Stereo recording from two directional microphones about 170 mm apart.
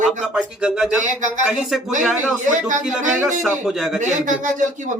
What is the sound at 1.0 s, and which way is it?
Speech, 45° right (ahead or behind).